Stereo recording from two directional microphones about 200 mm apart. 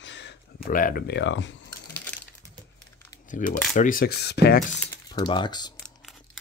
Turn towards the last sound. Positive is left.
turn(degrees=20)  # may be behind; listen again after turning